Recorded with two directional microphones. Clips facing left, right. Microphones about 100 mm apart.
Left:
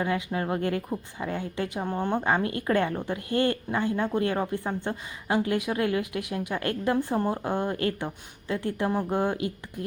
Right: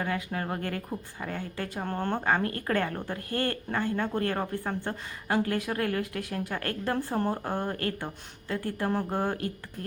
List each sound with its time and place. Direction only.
0.0 s speech: 15° left (ahead or behind)